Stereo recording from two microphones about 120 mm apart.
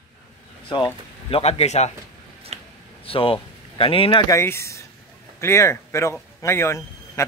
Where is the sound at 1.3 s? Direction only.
60° left (ahead or behind).